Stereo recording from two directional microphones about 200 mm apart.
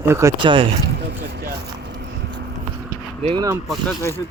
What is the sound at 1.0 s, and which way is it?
Vehicle, 55° right (ahead or behind).